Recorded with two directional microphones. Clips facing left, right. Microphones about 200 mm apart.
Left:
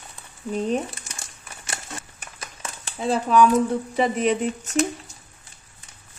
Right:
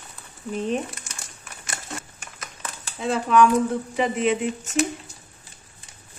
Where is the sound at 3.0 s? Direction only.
35° left (ahead or behind).